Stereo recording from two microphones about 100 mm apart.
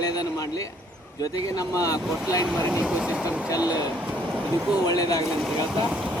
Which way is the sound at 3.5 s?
35° left (ahead or behind).